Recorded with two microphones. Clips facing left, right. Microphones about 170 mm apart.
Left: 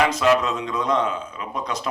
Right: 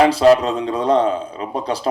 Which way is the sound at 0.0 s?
35° right (ahead or behind).